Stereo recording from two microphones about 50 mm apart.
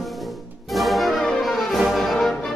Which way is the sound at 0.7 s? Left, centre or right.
Centre.